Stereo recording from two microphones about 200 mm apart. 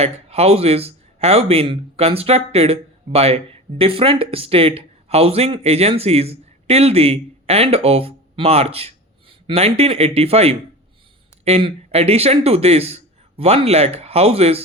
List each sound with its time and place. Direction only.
0.0 s speech: 30° right (ahead or behind)